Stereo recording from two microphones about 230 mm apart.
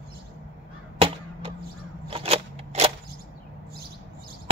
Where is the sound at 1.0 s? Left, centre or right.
Right.